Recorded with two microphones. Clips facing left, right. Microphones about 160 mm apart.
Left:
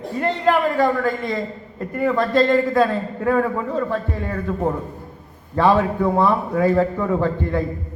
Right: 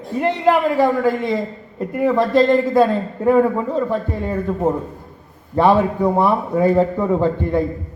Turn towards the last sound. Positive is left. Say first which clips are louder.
# right 3 dB
turn(degrees=-20)  # may be behind; listen again after turning